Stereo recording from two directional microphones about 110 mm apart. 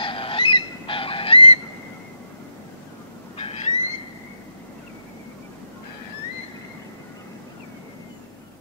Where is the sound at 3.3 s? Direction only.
65° left (ahead or behind).